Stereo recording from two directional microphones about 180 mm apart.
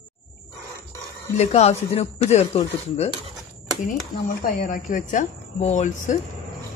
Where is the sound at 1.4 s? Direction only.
35° left (ahead or behind).